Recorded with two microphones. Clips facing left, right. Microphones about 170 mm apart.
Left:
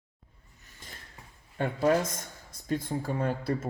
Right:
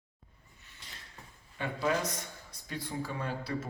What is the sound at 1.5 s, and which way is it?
A man's voice, 50° left (ahead or behind).